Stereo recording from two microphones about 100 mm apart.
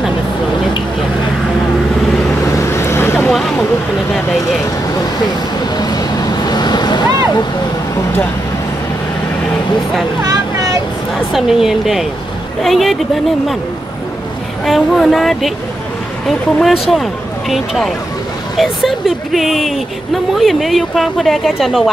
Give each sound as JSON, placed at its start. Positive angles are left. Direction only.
{"t": 2.5, "sound": "vehicle", "side_deg": 30}
{"t": 3.3, "sound": "vehicle", "side_deg": 5}
{"t": 5.8, "sound": "vehicle", "side_deg": 40}
{"t": 10.2, "sound": "vehicle", "side_deg": -40}
{"t": 11.3, "sound": "speech", "side_deg": -5}
{"t": 14.6, "sound": "speech", "side_deg": 5}